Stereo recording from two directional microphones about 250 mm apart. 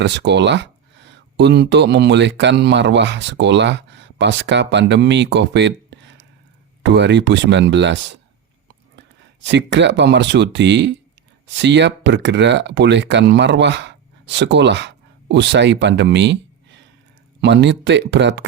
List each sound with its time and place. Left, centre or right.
0.0 s speech: right